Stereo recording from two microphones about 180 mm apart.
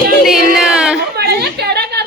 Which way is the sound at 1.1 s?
65° right (ahead or behind).